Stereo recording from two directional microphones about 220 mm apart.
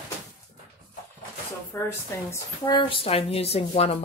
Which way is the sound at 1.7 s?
10° left (ahead or behind).